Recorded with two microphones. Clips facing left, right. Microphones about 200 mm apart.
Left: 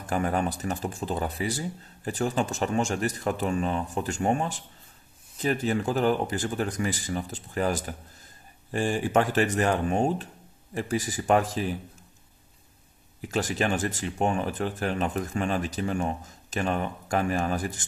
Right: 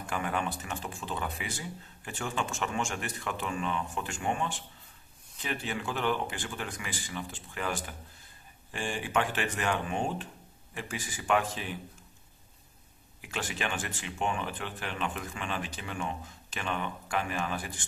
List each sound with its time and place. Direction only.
0.0 s speech: 40° left (ahead or behind)
13.2 s speech: 40° left (ahead or behind)